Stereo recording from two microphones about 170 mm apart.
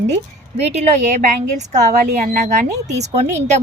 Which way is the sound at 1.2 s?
45° right (ahead or behind).